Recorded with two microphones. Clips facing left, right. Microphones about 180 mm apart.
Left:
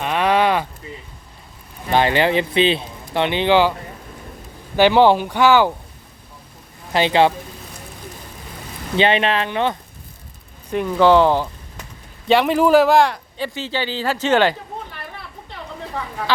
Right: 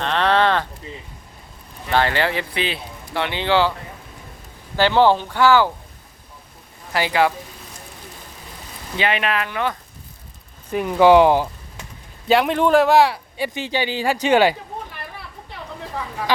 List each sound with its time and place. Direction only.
0.0 s a sound: 10° left (ahead or behind)
1.9 s speech: 15° left (ahead or behind)
4.8 s speech: 15° left (ahead or behind)
6.9 s speech: 25° left (ahead or behind)
9.0 s speech: 25° left (ahead or behind)
10.8 s speech: 15° right (ahead or behind)
12.3 s speech: centre (ahead or behind)